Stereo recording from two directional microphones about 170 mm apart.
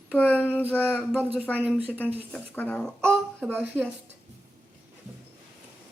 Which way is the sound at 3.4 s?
10° right (ahead or behind).